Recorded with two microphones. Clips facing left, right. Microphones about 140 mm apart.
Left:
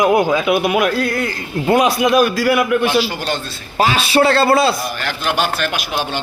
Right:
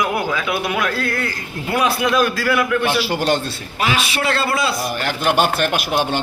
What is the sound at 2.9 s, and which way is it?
Speech, 60° right (ahead or behind).